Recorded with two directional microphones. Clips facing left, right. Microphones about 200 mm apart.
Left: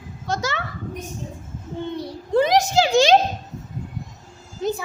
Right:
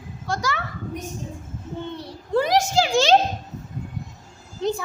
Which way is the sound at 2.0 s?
20° left (ahead or behind).